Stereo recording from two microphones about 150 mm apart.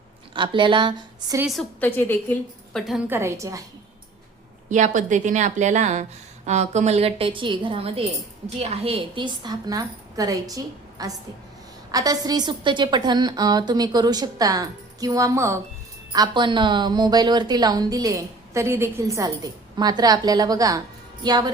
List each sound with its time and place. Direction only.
0.3 s a woman's voice: 30° right (ahead or behind)
1.8 s a woman's voice: 15° left (ahead or behind)
2.7 s a woman's voice: centre (ahead or behind)
3.1 s a woman's voice: 15° right (ahead or behind)
4.7 s a woman's voice: 55° right (ahead or behind); by 21.5 s 30° right (ahead or behind)